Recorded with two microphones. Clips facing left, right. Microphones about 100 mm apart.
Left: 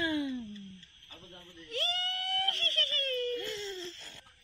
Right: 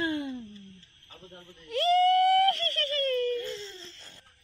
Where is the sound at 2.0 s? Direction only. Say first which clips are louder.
Right 17 dB; 55° right (ahead or behind).